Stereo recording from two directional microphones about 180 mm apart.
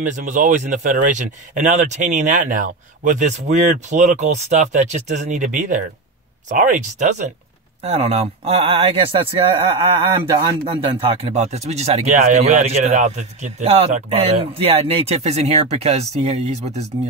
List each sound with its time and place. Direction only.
0.0 s speech: 45° right (ahead or behind)